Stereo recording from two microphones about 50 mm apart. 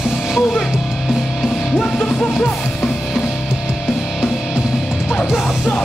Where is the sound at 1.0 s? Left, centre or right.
Centre.